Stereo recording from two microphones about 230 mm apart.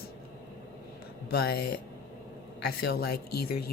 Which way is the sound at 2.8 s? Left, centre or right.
Left.